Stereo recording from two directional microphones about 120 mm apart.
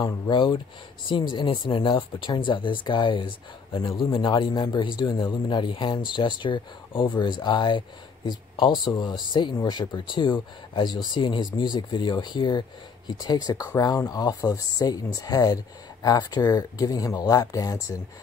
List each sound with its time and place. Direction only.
0.0 s speech: 40° left (ahead or behind)